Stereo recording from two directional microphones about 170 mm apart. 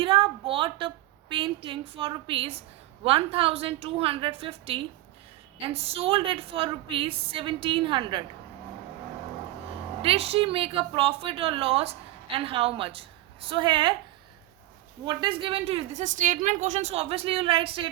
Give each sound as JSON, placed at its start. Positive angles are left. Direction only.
{"t": 0.0, "sound": "a sound", "side_deg": -30}
{"t": 1.3, "sound": "a woman's voice", "side_deg": -30}
{"t": 10.0, "sound": "a woman's voice", "side_deg": -35}
{"t": 15.0, "sound": "a woman's voice", "side_deg": -25}